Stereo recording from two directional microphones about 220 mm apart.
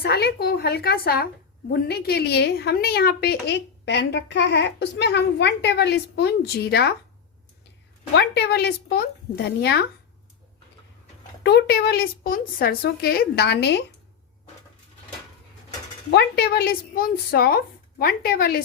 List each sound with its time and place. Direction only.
0.0 s a woman's voice: 45° left (ahead or behind)
8.1 s a woman's voice: 50° left (ahead or behind)
11.4 s a woman's voice: 50° left (ahead or behind)
16.1 s a woman's voice: 45° left (ahead or behind)